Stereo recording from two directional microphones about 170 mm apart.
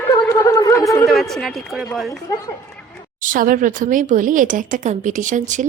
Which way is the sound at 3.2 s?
55° right (ahead or behind).